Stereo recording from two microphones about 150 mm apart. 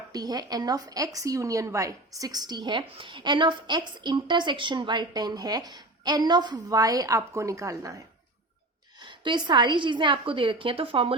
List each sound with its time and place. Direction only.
0.1 s a woman's voice: 25° right (ahead or behind)